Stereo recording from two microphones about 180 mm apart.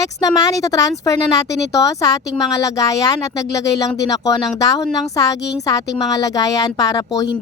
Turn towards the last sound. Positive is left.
turn(degrees=20)  # may be behind; listen again after turning